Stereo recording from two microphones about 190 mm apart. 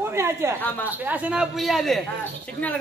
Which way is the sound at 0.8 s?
10° right (ahead or behind).